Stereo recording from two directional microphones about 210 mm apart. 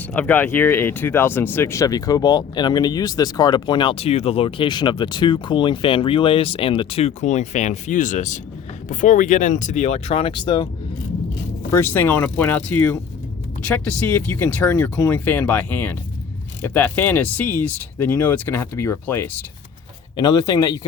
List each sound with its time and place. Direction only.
0.1 s speech: 10° left (ahead or behind)
11.7 s speech: 10° left (ahead or behind)